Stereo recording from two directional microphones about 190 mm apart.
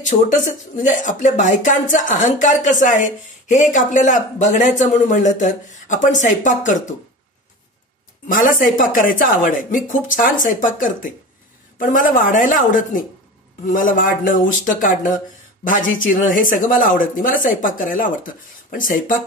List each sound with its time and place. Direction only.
0.0 s a man's voice: 40° left (ahead or behind)
8.3 s speech: 45° left (ahead or behind)